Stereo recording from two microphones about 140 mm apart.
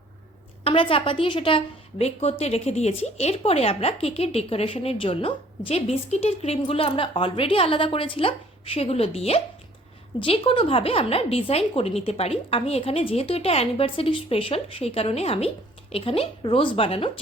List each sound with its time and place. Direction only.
0.6 s a woman's voice: 40° left (ahead or behind)